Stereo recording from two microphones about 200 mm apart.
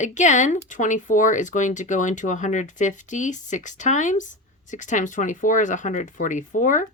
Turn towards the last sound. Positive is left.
turn(degrees=40)  # may be behind; listen again after turning